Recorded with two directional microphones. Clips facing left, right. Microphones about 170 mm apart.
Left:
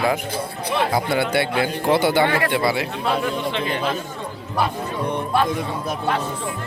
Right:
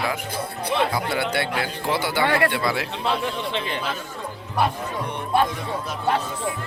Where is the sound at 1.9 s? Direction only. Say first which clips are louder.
Left 8 dB; 55° left (ahead or behind).